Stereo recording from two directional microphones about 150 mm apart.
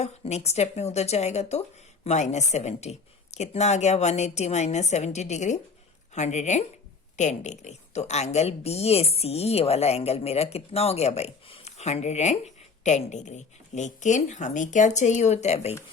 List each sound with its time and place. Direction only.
0.0 s speech: 45° left (ahead or behind)